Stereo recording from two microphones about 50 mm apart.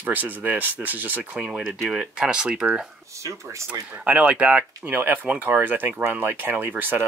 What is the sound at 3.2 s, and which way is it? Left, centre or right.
Speech, right.